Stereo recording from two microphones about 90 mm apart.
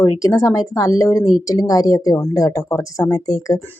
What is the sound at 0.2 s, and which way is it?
Speech, 35° left (ahead or behind).